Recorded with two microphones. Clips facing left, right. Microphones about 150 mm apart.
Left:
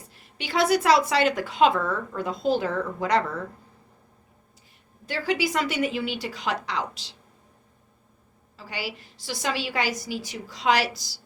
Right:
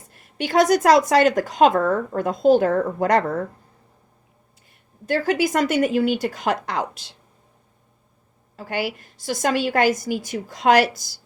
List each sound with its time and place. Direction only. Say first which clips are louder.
0.1 s a woman's voice: right 8 dB; 50° right (ahead or behind)
5.0 s a woman's voice: right 6 dB; 45° right (ahead or behind)
8.5 s a woman's voice: right 8 dB; 55° right (ahead or behind)